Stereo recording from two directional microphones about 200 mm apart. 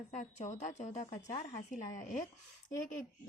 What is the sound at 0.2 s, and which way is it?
Speech, 35° left (ahead or behind).